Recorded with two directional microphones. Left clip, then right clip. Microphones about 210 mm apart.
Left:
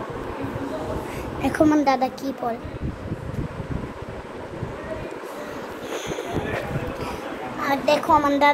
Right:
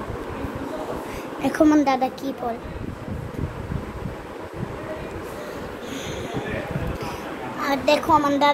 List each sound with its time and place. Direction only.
1.4 s a woman's voice: 10° right (ahead or behind)
7.6 s a child's voice: 20° right (ahead or behind)
8.2 s a woman's voice: 5° right (ahead or behind)